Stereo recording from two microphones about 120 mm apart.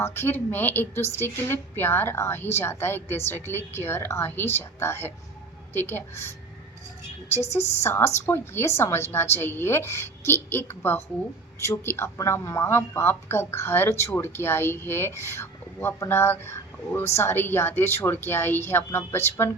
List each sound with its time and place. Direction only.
0.0 s a woman's voice: 20° left (ahead or behind)
7.8 s speech: 20° left (ahead or behind)